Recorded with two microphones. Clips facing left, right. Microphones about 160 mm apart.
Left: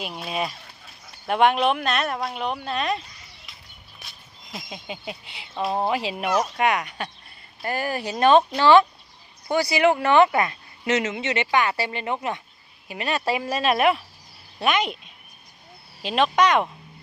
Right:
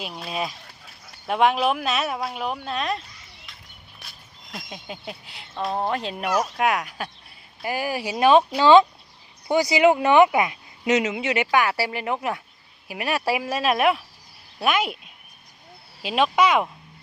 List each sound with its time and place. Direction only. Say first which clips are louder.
0.0 s speech: left 1 dB; 5° left (ahead or behind)
4.0 s a sound: even; centre (ahead or behind)
4.5 s speech: left 1 dB; centre (ahead or behind)
8.6 s speech: right 1 dB; 20° right (ahead or behind)